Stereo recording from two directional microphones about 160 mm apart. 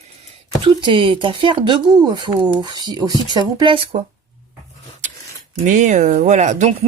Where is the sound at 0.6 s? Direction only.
30° right (ahead or behind).